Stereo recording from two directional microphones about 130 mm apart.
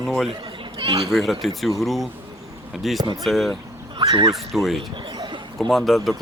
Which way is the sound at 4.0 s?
30° right (ahead or behind).